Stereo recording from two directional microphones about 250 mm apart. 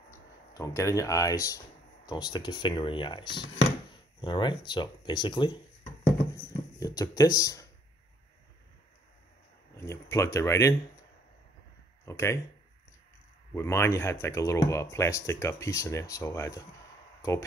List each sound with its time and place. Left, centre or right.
0.1 s speech: centre
9.8 s speech: centre
12.0 s speech: centre
13.5 s speech: centre